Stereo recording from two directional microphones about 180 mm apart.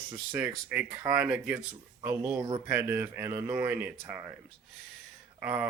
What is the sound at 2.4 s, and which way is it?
Speech, 25° right (ahead or behind).